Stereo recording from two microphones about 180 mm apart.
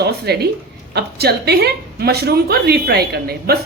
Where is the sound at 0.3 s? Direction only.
65° right (ahead or behind).